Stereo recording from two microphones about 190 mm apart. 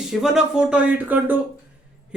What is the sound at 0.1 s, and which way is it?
Speech, centre (ahead or behind).